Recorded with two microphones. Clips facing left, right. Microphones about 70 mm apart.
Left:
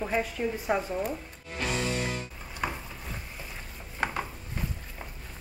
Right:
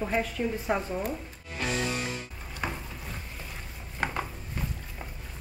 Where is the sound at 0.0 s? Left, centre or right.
Centre.